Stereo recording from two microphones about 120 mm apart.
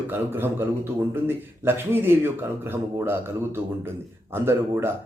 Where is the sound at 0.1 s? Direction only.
20° right (ahead or behind).